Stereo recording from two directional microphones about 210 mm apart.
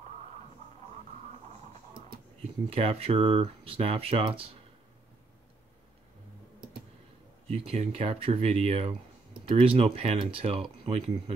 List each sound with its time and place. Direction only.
2.7 s speech: 30° right (ahead or behind)
7.4 s speech: 30° right (ahead or behind)